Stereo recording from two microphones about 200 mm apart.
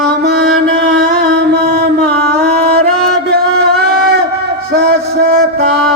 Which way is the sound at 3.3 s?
55° right (ahead or behind).